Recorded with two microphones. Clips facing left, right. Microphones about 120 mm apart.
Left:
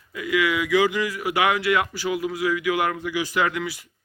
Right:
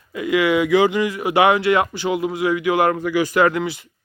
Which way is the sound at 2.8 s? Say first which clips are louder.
Right 7 dB; 50° right (ahead or behind).